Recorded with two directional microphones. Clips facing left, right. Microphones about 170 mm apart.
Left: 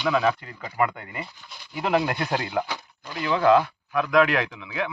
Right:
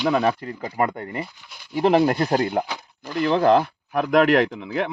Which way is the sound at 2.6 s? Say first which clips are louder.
Right 2 dB; 25° right (ahead or behind).